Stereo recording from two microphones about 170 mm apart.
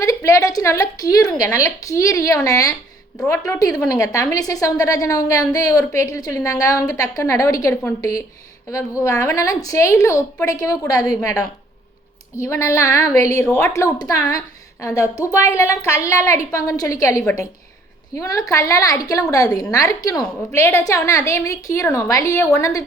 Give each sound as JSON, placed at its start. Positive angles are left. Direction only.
{"t": 0.0, "sound": "a woman's voice", "side_deg": 20}
{"t": 1.2, "sound": "speech", "side_deg": 5}
{"t": 1.5, "sound": "a woman's voice", "side_deg": 20}